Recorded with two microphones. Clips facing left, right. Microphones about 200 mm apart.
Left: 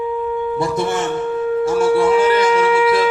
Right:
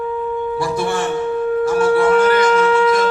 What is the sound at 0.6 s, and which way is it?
Music, 20° left (ahead or behind).